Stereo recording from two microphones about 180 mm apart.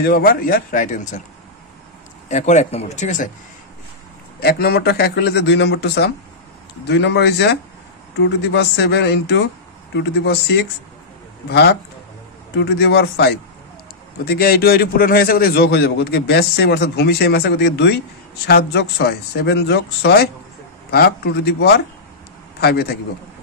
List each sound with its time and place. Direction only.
0.0 s speech: 55° left (ahead or behind)
2.2 s speech: 40° left (ahead or behind)
4.4 s a man's voice: 60° left (ahead or behind)
12.5 s a man's voice: 70° left (ahead or behind)